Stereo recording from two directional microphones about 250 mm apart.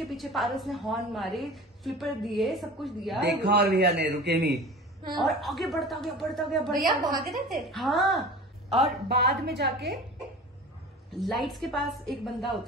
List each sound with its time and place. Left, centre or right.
0.0 s a woman's voice: centre
3.2 s a man's voice: right
5.1 s a woman's voice: centre
9.1 s a man's voice: right
11.1 s a woman's voice: centre